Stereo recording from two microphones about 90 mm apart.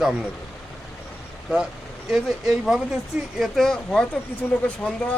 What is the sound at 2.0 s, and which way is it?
Speech, 5° right (ahead or behind).